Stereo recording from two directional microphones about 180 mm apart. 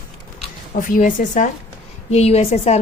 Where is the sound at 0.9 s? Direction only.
45° left (ahead or behind).